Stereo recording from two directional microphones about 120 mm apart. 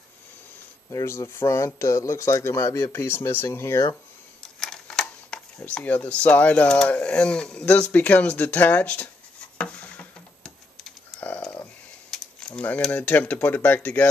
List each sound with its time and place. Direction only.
0.8 s speech: 25° left (ahead or behind)
4.4 s speech: 5° left (ahead or behind)
9.6 s a sound: 10° left (ahead or behind)